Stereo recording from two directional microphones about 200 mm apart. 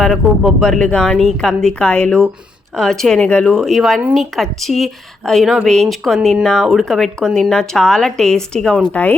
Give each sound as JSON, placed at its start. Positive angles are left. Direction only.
{"t": 0.0, "sound": "speech", "side_deg": 0}